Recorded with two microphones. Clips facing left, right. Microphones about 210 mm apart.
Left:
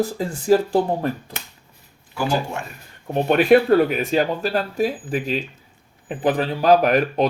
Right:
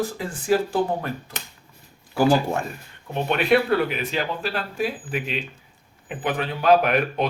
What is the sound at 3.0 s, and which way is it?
Speech, 45° left (ahead or behind).